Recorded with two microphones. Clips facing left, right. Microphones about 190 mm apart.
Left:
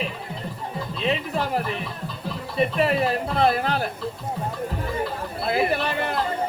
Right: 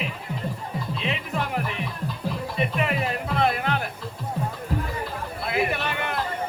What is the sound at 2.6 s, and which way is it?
Music, 35° left (ahead or behind).